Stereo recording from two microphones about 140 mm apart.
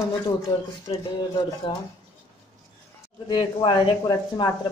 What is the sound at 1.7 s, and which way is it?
Speech, 35° left (ahead or behind).